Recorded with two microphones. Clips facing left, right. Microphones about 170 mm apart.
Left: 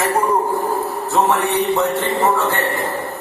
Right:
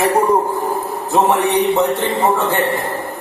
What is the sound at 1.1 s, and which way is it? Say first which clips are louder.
A man's voice: right 3 dB; 15° right (ahead or behind).